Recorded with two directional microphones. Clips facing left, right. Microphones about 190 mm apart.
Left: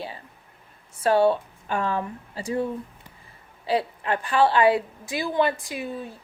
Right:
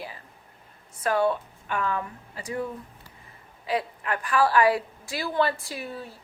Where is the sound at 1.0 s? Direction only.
30° left (ahead or behind).